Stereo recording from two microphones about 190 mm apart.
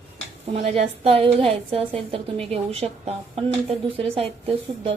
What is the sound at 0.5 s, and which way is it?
A woman's voice, 30° right (ahead or behind).